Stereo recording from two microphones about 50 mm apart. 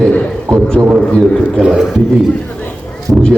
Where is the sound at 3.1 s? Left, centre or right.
Right.